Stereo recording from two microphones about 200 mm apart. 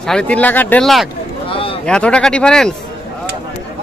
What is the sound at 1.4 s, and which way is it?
Speech, 25° left (ahead or behind).